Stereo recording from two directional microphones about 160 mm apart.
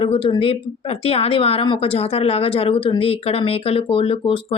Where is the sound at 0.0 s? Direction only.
35° left (ahead or behind).